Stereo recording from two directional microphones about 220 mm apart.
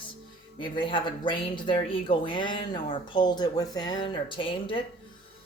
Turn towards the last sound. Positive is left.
turn(degrees=25)  # may be behind; listen again after turning